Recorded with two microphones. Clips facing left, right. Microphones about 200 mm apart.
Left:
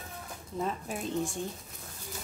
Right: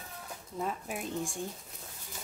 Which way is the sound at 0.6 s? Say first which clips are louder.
Left 2 dB; 10° right (ahead or behind).